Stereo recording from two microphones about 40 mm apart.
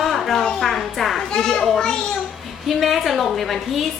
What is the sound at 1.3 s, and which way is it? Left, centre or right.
Speech, centre.